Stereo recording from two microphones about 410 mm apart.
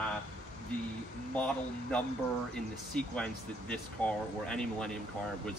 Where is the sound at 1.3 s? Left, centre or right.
Centre.